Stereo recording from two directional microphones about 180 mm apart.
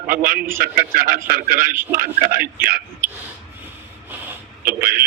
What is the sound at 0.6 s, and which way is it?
A man's voice, 55° right (ahead or behind).